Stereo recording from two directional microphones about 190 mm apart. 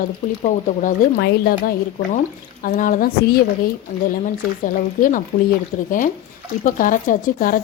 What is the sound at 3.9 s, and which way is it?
Speech, 35° left (ahead or behind).